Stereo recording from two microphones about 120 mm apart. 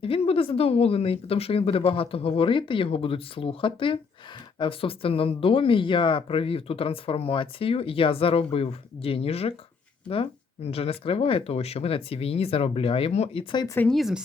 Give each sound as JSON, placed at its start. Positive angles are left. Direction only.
{"t": 0.0, "sound": "speech", "side_deg": 50}
{"t": 13.9, "sound": "speech", "side_deg": 0}